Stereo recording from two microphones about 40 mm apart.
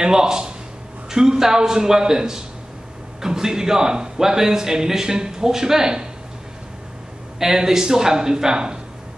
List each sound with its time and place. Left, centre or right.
0.0 s a man's voice: centre
7.3 s a man's voice: centre